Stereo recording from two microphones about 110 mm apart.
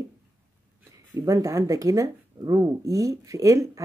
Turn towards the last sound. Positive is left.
turn(degrees=-30)  # may be behind; listen again after turning